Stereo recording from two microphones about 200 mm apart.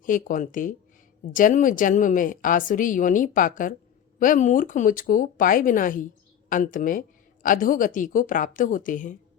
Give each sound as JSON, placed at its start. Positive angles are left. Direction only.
{"t": 0.0, "sound": "a woman's voice", "side_deg": 40}